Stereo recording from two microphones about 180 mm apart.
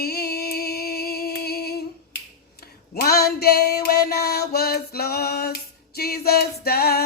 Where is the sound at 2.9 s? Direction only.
60° left (ahead or behind).